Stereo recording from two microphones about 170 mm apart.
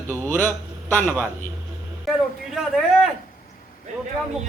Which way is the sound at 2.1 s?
Centre (ahead or behind).